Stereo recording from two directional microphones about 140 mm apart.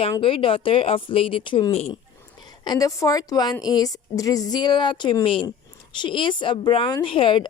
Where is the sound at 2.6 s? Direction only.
25° left (ahead or behind).